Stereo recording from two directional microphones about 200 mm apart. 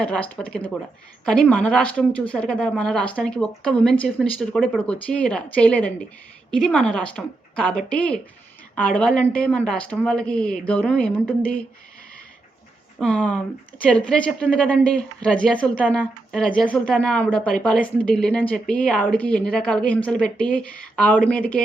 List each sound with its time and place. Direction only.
0.0 s a woman's voice: 5° left (ahead or behind)
13.0 s a woman's voice: 5° left (ahead or behind)